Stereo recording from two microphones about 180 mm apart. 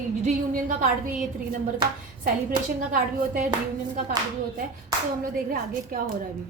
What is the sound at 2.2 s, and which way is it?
A woman's voice, 50° right (ahead or behind).